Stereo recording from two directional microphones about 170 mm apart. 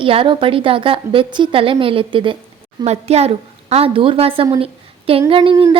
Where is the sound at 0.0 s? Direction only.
30° right (ahead or behind).